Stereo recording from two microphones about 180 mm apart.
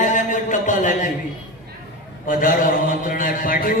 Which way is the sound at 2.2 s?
50° left (ahead or behind).